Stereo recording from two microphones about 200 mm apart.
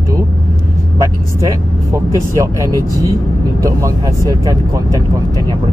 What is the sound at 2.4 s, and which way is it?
Speech, 15° right (ahead or behind).